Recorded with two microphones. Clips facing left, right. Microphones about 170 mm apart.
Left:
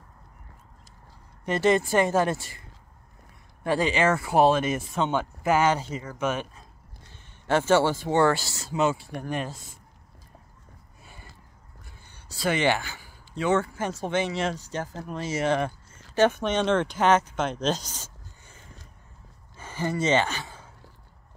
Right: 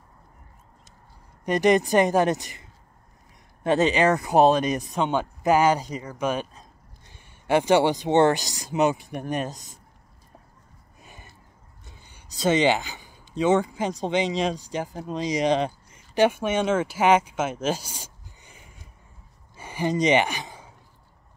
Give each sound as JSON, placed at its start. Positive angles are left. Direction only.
{"t": 1.4, "sound": "speech", "side_deg": -15}
{"t": 3.6, "sound": "speech", "side_deg": -20}
{"t": 11.0, "sound": "a sound", "side_deg": -15}
{"t": 11.8, "sound": "speech", "side_deg": -20}
{"t": 19.5, "sound": "gasp", "side_deg": -15}